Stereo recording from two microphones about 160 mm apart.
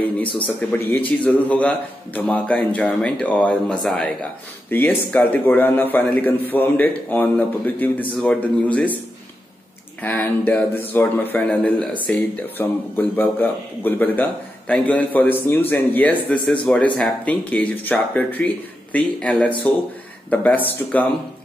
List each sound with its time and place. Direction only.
0.7 s a man's voice: 10° left (ahead or behind)
10.0 s a man's voice: 10° left (ahead or behind)